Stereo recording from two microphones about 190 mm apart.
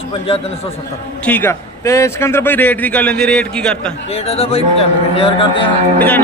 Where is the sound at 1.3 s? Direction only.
10° left (ahead or behind).